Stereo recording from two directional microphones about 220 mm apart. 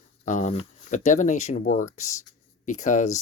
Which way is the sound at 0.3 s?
35° left (ahead or behind).